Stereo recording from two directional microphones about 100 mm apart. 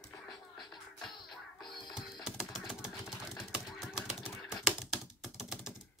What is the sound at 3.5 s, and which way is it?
Typing, 5° right (ahead or behind).